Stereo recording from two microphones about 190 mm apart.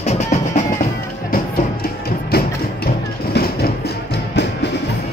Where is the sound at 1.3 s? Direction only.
55° left (ahead or behind).